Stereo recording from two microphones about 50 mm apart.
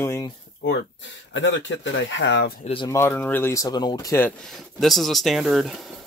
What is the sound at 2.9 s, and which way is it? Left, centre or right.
Speech, left.